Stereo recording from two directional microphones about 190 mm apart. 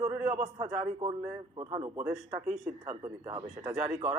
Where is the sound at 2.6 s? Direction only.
15° right (ahead or behind).